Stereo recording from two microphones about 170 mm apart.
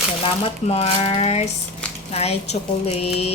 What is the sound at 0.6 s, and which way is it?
Speech, 40° left (ahead or behind).